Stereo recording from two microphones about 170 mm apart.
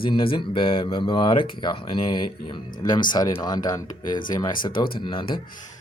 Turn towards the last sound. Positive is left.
turn(degrees=30)  # may be behind; listen again after turning